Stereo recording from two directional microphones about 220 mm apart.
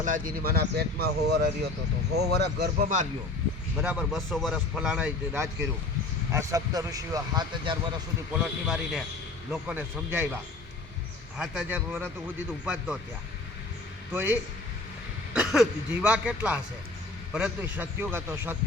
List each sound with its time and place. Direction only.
0.0 s speech: 40° right (ahead or behind)
3.8 s a man's voice: 5° right (ahead or behind); by 7.8 s 20° right (ahead or behind)
8.6 s a man's voice: centre (ahead or behind)
11.3 s a man's voice: 5° right (ahead or behind)
14.1 s a man's voice: 10° right (ahead or behind)